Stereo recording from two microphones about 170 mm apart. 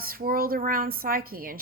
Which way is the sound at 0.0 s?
60° right (ahead or behind).